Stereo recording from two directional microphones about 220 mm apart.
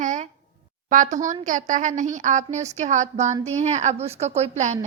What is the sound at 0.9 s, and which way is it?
A woman's voice, 35° right (ahead or behind).